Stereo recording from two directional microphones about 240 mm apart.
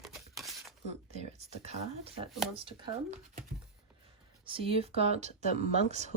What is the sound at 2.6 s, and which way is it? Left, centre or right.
Speech, right.